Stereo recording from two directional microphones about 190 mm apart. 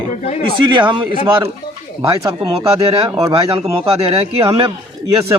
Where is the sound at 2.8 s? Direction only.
30° right (ahead or behind).